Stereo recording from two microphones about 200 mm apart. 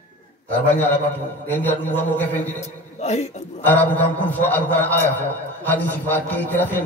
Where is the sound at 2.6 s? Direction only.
35° left (ahead or behind).